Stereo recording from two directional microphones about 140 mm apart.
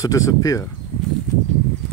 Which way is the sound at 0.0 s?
25° left (ahead or behind).